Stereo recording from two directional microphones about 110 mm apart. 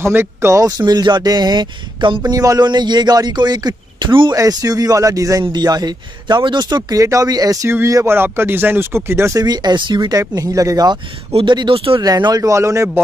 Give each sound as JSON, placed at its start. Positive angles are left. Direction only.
{"t": 0.0, "sound": "speech", "side_deg": -25}
{"t": 2.3, "sound": "speech", "side_deg": -35}
{"t": 4.3, "sound": "speech", "side_deg": -35}
{"t": 7.7, "sound": "speech", "side_deg": -25}
{"t": 9.4, "sound": "speech", "side_deg": -40}
{"t": 11.3, "sound": "speech", "side_deg": -45}
{"t": 12.0, "sound": "speech", "side_deg": -35}